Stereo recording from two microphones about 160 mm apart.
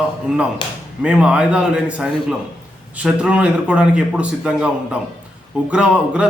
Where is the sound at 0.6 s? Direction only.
30° left (ahead or behind).